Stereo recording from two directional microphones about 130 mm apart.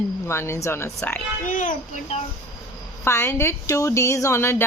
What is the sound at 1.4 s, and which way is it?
Speech, 90° left.